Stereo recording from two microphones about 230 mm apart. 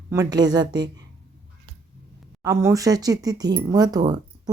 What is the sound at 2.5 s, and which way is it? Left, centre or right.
Speech, centre.